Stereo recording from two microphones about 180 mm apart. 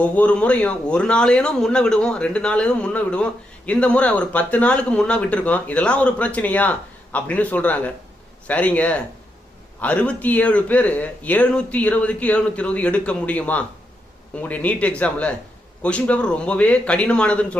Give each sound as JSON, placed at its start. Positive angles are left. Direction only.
{"t": 0.0, "sound": "a man's voice", "side_deg": 5}